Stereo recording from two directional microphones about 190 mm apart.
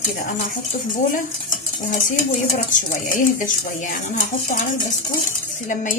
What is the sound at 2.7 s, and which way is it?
Speech, 45° left (ahead or behind).